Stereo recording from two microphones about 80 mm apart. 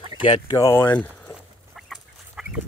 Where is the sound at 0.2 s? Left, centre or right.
Left.